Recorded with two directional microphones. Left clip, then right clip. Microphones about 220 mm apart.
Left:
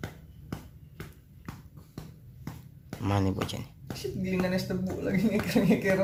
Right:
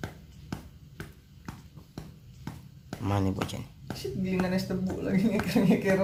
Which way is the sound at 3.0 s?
Centre (ahead or behind).